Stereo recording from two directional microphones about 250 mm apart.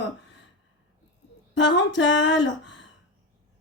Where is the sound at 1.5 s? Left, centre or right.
Left.